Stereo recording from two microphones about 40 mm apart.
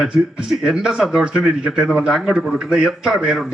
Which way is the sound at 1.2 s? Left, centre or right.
Right.